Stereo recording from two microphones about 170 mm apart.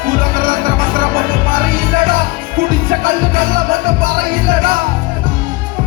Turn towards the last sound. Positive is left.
turn(degrees=-55)  # may be behind; listen again after turning